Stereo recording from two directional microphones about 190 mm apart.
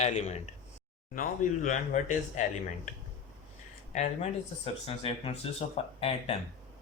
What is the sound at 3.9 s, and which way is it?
Speech, 35° left (ahead or behind).